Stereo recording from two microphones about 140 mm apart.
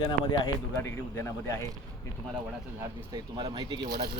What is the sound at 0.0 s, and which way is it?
Speech, 35° left (ahead or behind).